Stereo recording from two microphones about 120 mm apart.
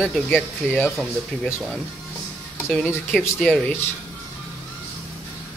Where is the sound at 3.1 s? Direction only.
5° left (ahead or behind).